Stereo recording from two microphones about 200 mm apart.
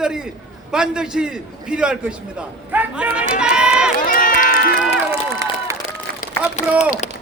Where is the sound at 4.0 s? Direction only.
40° left (ahead or behind).